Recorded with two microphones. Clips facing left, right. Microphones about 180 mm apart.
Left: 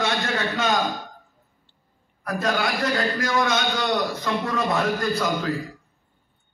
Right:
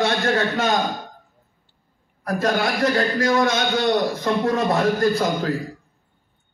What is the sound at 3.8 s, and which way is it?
A man's voice, 50° right (ahead or behind).